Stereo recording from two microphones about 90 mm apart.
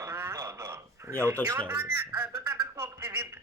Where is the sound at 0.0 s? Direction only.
30° right (ahead or behind).